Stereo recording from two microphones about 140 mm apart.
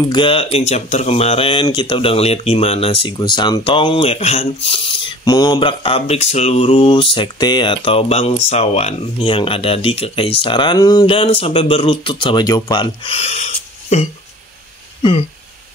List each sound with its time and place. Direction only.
0.1 s speech: 40° left (ahead or behind)
5.2 s speech: 30° left (ahead or behind)
11.1 s speech: 40° left (ahead or behind)
13.1 s speech: 50° left (ahead or behind)
15.0 s a sound: 40° left (ahead or behind)